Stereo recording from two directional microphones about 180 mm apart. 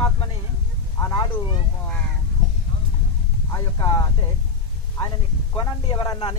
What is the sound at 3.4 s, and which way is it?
Speech, 20° left (ahead or behind).